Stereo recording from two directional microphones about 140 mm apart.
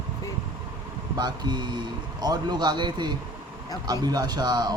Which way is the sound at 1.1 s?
30° right (ahead or behind).